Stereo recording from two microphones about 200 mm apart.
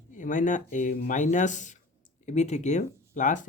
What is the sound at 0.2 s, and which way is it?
Speech, 40° left (ahead or behind).